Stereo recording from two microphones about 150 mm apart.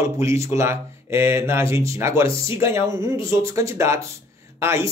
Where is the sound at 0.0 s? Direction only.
20° right (ahead or behind).